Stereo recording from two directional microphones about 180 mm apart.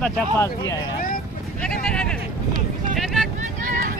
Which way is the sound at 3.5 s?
50° right (ahead or behind).